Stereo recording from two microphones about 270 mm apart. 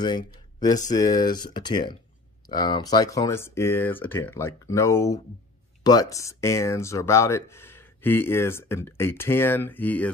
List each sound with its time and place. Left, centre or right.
0.9 s speech: centre